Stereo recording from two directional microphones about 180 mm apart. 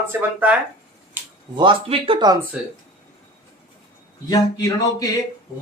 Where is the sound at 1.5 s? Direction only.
25° right (ahead or behind).